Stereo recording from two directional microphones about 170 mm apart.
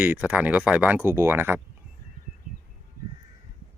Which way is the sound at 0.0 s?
10° right (ahead or behind).